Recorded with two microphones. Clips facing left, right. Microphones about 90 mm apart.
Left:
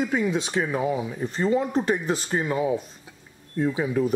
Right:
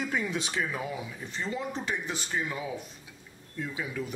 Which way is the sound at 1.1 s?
40° left (ahead or behind).